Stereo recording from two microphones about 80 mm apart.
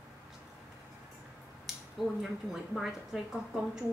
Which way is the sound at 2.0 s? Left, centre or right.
Centre.